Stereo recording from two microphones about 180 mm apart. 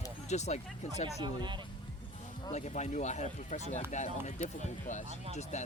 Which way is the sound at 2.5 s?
40° left (ahead or behind).